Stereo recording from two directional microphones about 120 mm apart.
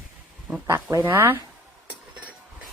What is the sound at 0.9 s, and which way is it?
Speech, 20° right (ahead or behind).